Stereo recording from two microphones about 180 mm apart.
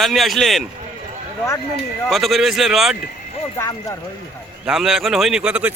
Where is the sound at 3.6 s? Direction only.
15° left (ahead or behind).